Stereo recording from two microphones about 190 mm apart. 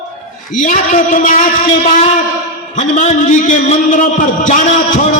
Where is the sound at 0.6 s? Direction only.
45° left (ahead or behind).